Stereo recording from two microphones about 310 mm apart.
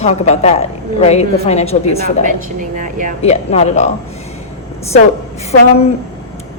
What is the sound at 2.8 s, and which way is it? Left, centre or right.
Speech, right.